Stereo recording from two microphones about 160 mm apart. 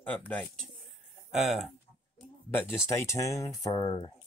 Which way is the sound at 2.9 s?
20° left (ahead or behind).